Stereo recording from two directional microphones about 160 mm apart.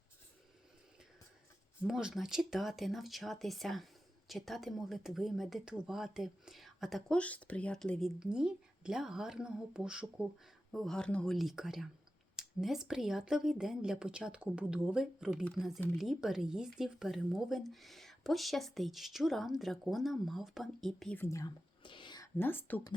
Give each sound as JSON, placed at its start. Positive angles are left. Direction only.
{"t": 1.8, "sound": "speech", "side_deg": -5}
{"t": 21.2, "sound": "speech", "side_deg": 20}
{"t": 21.8, "sound": "whispering", "side_deg": 30}
{"t": 22.4, "sound": "speech", "side_deg": 15}